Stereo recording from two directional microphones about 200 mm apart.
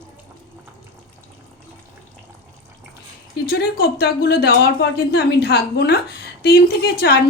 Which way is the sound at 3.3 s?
50° left (ahead or behind).